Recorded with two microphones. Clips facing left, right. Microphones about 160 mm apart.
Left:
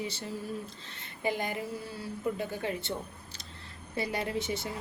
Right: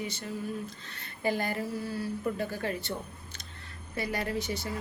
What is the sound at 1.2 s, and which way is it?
A woman's voice, 20° left (ahead or behind).